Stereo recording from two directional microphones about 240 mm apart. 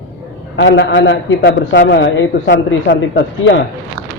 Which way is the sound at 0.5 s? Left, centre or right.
Left.